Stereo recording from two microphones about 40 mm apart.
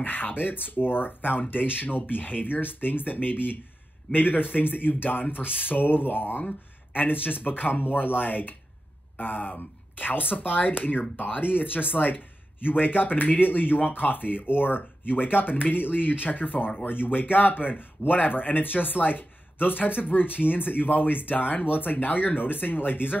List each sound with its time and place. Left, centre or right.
0.0 s speech: left